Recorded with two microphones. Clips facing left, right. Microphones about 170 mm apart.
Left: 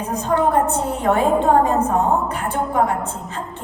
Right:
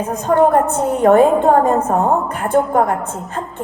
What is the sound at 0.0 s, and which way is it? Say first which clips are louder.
A woman's voice: right 5 dB; 50° right (ahead or behind).